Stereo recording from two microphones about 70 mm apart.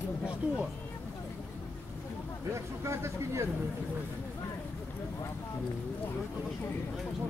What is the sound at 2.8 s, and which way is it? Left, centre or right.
Speech, right.